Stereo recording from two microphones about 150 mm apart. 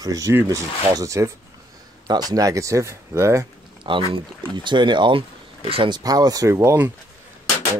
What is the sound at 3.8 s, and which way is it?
Speech, 35° right (ahead or behind).